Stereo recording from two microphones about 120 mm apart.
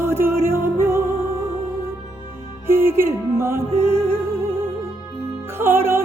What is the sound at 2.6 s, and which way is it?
Music, 20° right (ahead or behind).